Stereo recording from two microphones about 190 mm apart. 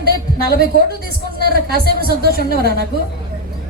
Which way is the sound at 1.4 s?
55° right (ahead or behind).